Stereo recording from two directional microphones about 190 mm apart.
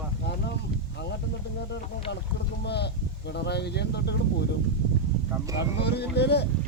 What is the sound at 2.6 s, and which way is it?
Speech, 60° left (ahead or behind).